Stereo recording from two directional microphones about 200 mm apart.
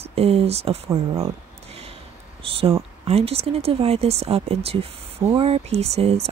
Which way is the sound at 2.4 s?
30° right (ahead or behind).